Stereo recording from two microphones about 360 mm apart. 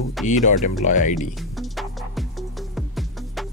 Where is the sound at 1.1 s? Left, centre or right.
Centre.